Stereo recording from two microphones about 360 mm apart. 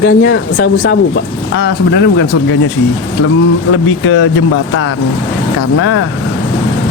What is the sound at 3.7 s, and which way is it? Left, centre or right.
Speech, left.